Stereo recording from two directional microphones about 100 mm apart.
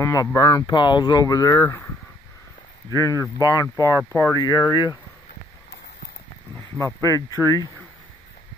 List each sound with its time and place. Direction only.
0.0 s speech: 30° left (ahead or behind)
0.7 s speech: 50° left (ahead or behind); by 1.9 s 30° left (ahead or behind)
2.9 s speech: 30° left (ahead or behind)
6.8 s speech: 35° left (ahead or behind)